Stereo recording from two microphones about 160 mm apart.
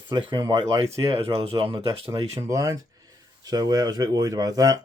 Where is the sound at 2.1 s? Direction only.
20° right (ahead or behind).